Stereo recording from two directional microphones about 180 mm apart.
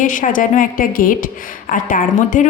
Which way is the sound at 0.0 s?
45° left (ahead or behind).